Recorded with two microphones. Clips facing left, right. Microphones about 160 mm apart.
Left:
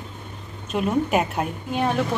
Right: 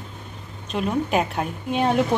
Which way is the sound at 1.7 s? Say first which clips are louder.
Right 3 dB; 20° right (ahead or behind).